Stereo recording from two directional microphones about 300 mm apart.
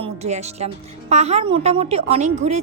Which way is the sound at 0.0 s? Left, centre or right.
Right.